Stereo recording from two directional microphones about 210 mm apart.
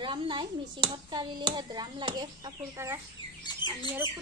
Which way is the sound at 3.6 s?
60° left (ahead or behind).